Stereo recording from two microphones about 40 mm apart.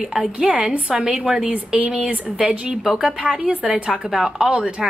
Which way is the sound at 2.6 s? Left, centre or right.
Right.